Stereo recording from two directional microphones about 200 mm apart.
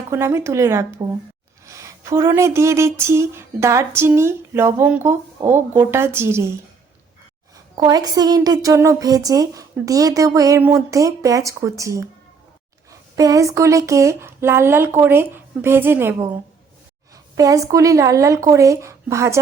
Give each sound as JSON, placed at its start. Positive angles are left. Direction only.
{"t": 0.1, "sound": "speech", "side_deg": -15}
{"t": 7.8, "sound": "speech", "side_deg": -20}
{"t": 17.3, "sound": "speech", "side_deg": -15}